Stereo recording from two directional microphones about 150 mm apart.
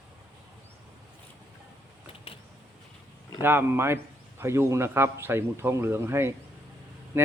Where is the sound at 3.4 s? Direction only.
15° right (ahead or behind).